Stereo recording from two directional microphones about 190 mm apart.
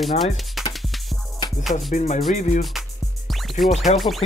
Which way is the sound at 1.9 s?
45° left (ahead or behind).